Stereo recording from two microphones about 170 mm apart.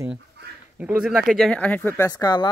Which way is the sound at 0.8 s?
5° right (ahead or behind).